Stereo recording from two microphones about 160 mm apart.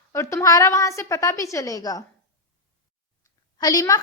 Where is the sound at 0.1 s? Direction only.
20° left (ahead or behind).